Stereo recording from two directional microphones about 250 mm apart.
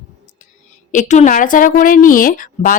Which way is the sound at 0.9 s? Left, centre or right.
Left.